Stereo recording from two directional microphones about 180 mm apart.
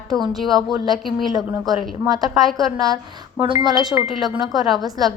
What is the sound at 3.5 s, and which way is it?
Speech, 20° right (ahead or behind).